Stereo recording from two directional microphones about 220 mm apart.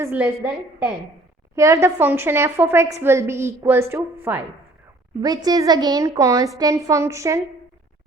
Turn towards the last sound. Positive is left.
turn(degrees=-15)  # may be behind; listen again after turning